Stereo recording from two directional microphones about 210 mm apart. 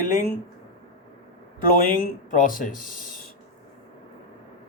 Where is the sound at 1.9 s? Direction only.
40° left (ahead or behind).